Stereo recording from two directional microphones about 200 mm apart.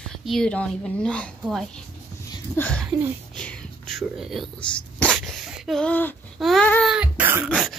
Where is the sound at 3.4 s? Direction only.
5° left (ahead or behind).